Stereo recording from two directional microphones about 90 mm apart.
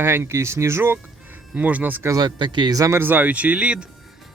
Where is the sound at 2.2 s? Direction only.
60° right (ahead or behind).